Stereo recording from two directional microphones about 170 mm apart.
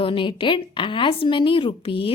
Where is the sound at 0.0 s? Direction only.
30° left (ahead or behind).